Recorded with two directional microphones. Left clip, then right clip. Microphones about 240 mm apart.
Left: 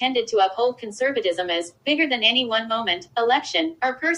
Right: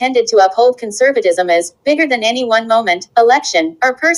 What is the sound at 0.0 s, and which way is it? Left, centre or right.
A woman's voice, centre.